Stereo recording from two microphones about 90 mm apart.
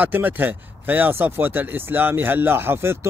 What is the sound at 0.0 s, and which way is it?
Speech, 20° right (ahead or behind).